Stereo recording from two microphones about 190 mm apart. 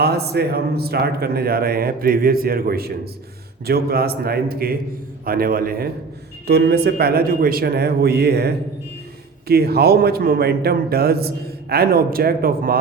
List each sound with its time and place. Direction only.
0.0 s a man's voice: 60° right (ahead or behind)